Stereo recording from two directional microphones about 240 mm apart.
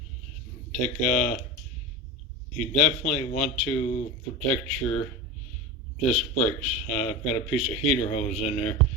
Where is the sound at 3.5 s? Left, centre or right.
Left.